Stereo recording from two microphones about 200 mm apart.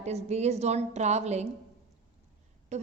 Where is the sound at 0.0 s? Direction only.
35° right (ahead or behind).